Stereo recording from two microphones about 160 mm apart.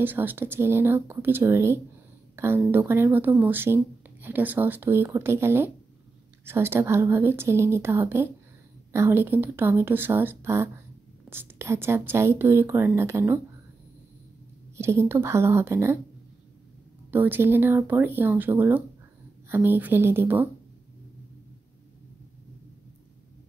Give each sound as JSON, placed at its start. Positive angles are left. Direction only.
{"t": 0.0, "sound": "speech", "side_deg": -10}
{"t": 14.8, "sound": "speech", "side_deg": -15}
{"t": 17.1, "sound": "speech", "side_deg": -10}